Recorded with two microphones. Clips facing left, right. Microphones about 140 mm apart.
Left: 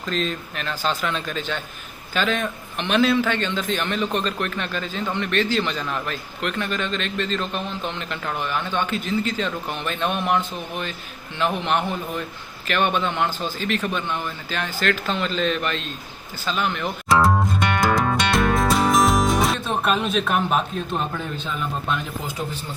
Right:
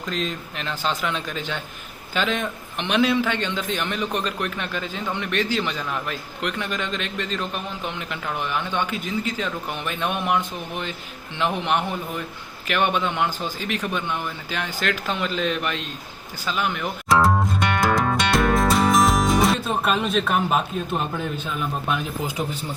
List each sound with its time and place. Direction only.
0.0 s a man's voice: 15° right (ahead or behind)
16.5 s music: 10° right (ahead or behind)
21.1 s a man's voice: 10° right (ahead or behind)